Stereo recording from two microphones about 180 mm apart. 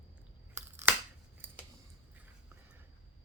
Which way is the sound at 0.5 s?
15° right (ahead or behind).